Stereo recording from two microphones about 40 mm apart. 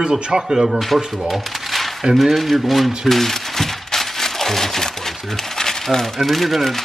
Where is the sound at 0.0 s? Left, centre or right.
Right.